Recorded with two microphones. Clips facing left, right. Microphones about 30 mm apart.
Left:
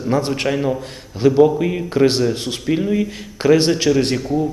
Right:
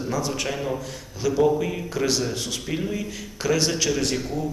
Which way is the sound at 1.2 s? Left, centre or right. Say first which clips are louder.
Left 9 dB; left.